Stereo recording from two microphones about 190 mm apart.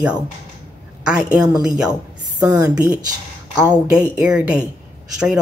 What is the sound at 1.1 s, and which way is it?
Speech, 5° right (ahead or behind).